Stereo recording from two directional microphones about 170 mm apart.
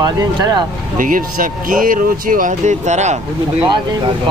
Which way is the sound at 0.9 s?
55° right (ahead or behind).